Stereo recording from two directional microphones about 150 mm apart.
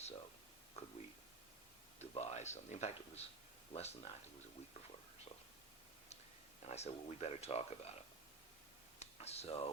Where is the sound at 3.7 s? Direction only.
45° left (ahead or behind).